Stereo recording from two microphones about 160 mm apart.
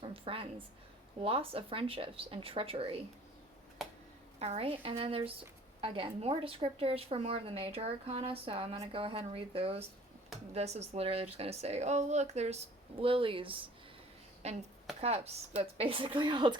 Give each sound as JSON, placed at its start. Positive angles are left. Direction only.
{"t": 0.0, "sound": "a woman's voice", "side_deg": -35}
{"t": 4.4, "sound": "a woman's voice", "side_deg": -40}